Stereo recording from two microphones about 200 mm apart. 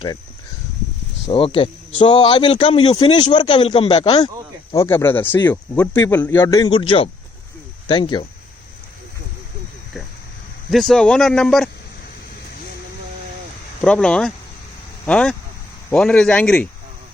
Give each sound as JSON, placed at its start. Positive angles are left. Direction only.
{"t": 1.3, "sound": "speech", "side_deg": 25}
{"t": 4.7, "sound": "speech", "side_deg": 15}
{"t": 10.7, "sound": "speech", "side_deg": 0}
{"t": 13.8, "sound": "speech", "side_deg": 5}